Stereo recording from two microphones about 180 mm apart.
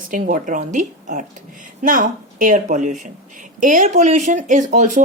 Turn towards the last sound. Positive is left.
turn(degrees=-45)  # may be behind; listen again after turning